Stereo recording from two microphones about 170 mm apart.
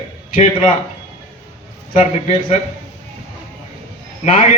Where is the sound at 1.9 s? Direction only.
45° left (ahead or behind).